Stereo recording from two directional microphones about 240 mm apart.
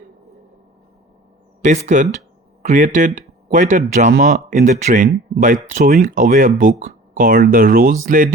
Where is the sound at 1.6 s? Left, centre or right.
Right.